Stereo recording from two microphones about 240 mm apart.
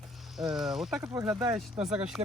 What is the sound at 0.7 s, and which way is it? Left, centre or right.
Speech, centre.